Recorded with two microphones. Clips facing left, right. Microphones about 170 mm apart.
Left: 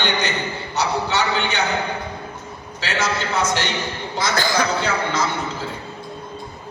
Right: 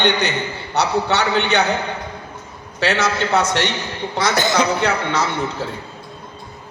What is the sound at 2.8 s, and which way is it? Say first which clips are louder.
Speech: right 5 dB; 65° right (ahead or behind).